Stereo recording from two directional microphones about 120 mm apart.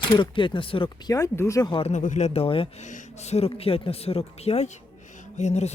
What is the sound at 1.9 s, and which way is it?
Speech, 85° left.